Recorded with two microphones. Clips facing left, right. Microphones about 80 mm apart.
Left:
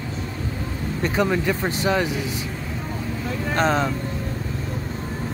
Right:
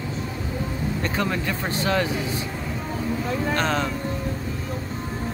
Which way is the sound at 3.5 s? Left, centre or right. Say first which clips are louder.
Left 5 dB; left.